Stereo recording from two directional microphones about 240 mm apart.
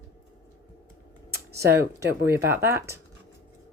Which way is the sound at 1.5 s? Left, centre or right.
Centre.